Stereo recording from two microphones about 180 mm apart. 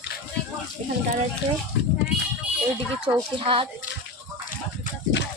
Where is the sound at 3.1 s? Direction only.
20° right (ahead or behind).